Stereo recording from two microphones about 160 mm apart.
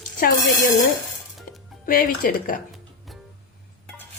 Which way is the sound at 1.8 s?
65° left (ahead or behind).